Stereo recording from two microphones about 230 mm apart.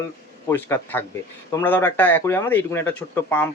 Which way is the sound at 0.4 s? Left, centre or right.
Centre.